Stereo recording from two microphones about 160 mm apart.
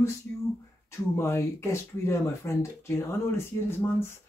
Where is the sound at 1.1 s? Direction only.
15° left (ahead or behind).